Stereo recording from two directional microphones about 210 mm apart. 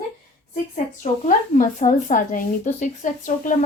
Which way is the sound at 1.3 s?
40° left (ahead or behind).